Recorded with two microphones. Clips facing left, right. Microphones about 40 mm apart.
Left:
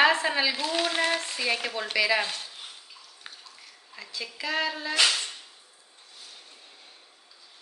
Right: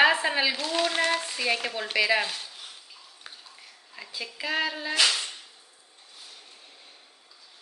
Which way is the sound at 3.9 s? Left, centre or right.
Centre.